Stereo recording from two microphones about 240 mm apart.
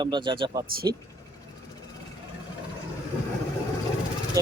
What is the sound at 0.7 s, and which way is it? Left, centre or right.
Speech, right.